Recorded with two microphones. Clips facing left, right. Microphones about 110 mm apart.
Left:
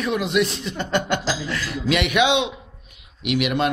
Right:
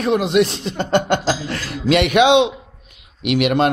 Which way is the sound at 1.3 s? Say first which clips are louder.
Right 4 dB; 45° right (ahead or behind).